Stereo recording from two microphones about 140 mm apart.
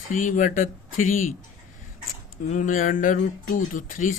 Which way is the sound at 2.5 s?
70° left (ahead or behind).